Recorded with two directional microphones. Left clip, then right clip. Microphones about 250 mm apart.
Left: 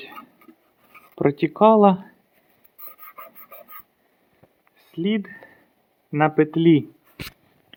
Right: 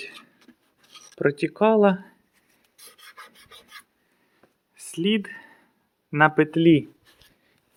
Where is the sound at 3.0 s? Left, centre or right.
Left.